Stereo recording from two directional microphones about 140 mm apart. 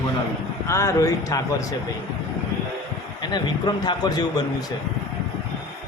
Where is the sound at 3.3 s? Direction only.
30° left (ahead or behind).